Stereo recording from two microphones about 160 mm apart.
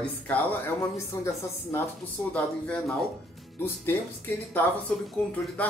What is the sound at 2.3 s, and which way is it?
Speech, 5° left (ahead or behind).